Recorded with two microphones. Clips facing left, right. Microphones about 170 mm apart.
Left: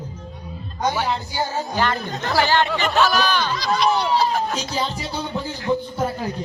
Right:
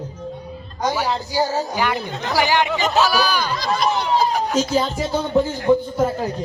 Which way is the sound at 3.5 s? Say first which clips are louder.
Left 2 dB; 50° right (ahead or behind).